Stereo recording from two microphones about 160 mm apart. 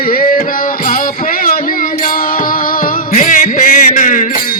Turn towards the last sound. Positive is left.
turn(degrees=55)  # may be behind; listen again after turning